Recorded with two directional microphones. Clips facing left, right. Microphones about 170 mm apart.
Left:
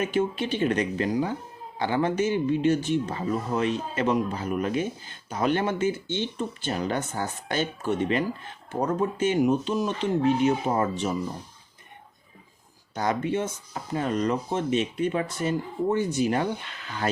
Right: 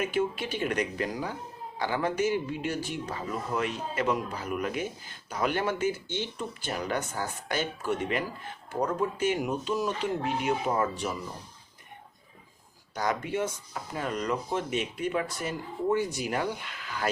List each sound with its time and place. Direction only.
0.1 s speech: 25° left (ahead or behind)
12.9 s speech: 25° left (ahead or behind)